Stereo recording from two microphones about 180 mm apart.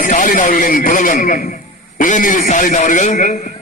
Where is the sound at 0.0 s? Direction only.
45° left (ahead or behind).